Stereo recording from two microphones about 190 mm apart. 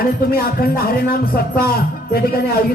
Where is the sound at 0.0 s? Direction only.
50° left (ahead or behind).